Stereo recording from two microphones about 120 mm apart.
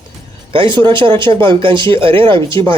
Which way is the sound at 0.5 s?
40° right (ahead or behind).